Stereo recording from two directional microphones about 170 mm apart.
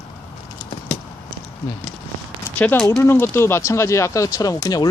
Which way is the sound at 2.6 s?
10° left (ahead or behind).